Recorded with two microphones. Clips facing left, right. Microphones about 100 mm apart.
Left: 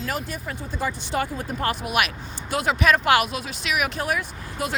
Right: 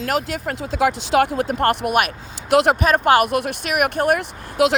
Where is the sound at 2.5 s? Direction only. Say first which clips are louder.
Right 9 dB; 75° right (ahead or behind).